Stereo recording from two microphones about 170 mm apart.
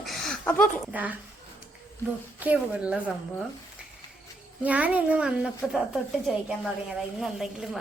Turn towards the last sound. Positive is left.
turn(degrees=0)  # may be behind; listen again after turning